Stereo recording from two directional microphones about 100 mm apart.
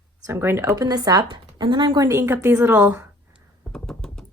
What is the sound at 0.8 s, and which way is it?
Speech, 40° right (ahead or behind).